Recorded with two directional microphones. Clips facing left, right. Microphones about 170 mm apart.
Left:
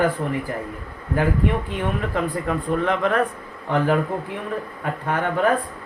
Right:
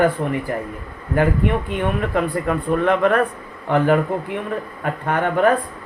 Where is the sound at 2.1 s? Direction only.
60° right (ahead or behind).